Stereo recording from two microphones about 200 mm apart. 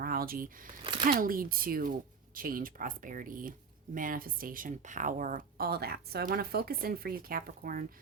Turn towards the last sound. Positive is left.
turn(degrees=-45)  # may be behind; listen again after turning